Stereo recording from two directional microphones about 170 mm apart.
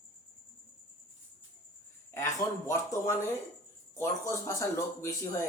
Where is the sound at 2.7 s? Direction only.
20° left (ahead or behind).